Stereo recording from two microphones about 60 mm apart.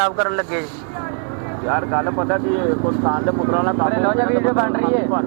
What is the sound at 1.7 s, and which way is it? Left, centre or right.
Speech, right.